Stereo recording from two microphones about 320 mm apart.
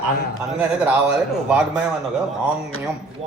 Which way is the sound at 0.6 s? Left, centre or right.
Centre.